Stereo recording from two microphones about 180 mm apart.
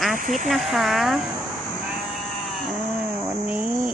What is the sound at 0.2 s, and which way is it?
Speech, 45° right (ahead or behind).